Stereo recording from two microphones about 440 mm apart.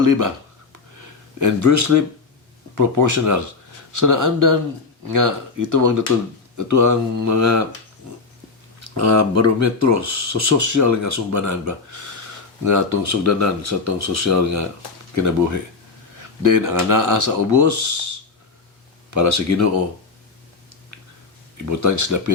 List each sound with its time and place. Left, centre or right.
0.0 s speech: right
1.4 s speech: right
8.8 s speech: right
21.7 s speech: right